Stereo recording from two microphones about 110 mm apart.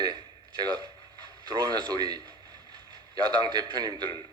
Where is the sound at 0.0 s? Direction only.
35° right (ahead or behind).